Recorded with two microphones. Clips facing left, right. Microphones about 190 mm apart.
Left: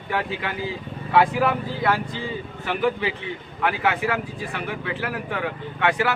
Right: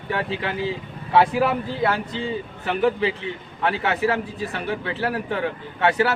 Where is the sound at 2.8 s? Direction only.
30° right (ahead or behind).